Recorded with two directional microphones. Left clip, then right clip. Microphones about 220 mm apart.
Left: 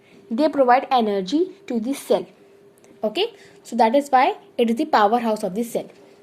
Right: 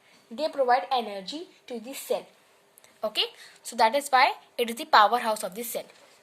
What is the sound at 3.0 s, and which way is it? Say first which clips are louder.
A woman's voice: left 5 dB; 35° right (ahead or behind).